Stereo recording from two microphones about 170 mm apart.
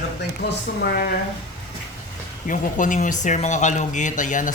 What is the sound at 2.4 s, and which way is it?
Speech, 50° left (ahead or behind).